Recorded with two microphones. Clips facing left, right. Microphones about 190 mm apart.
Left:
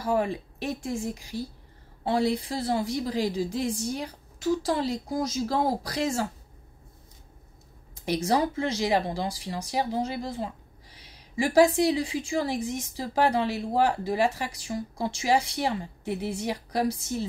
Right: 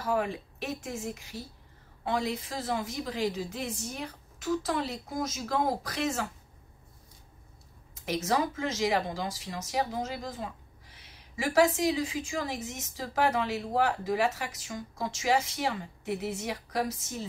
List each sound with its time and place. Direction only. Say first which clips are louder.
0.0 s speech: left 4 dB; 35° left (ahead or behind)
7.9 s a sound: left 4 dB; 35° left (ahead or behind)
8.3 s speech: left 4 dB; 35° left (ahead or behind)